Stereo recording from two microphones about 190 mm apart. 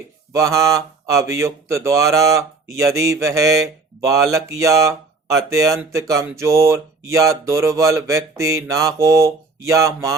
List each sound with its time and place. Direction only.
0.3 s speech: 15° right (ahead or behind)